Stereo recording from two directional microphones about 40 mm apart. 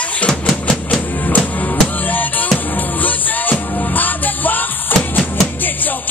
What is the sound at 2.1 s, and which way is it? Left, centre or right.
Music, left.